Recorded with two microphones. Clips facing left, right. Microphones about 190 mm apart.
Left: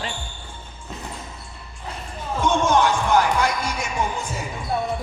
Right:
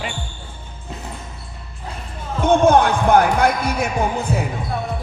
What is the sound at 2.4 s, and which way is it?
Speech, 55° right (ahead or behind).